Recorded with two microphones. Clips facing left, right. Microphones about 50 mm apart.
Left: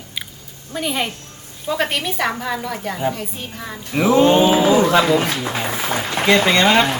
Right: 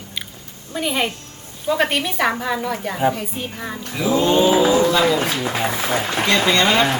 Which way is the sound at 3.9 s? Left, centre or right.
Left.